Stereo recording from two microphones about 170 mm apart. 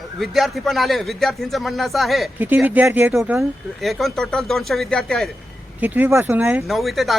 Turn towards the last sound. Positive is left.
turn(degrees=0)  # may be behind; listen again after turning